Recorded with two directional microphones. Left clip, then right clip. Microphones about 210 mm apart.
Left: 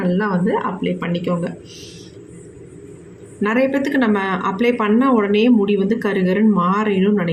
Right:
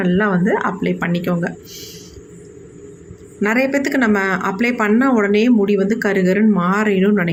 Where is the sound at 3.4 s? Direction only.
15° right (ahead or behind).